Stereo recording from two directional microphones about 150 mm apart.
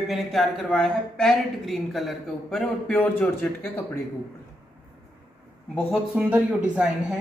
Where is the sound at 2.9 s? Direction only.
15° left (ahead or behind).